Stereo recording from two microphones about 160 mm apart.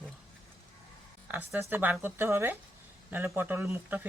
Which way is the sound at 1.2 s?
10° right (ahead or behind).